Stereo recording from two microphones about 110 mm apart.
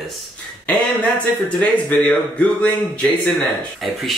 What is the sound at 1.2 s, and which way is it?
Speech, 15° left (ahead or behind).